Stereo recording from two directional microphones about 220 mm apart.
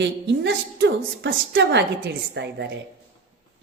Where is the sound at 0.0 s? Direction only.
50° right (ahead or behind).